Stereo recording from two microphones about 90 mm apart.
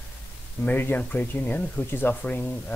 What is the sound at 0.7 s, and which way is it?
Speech, 20° left (ahead or behind).